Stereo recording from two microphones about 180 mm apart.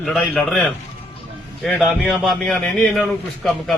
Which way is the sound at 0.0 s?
5° left (ahead or behind).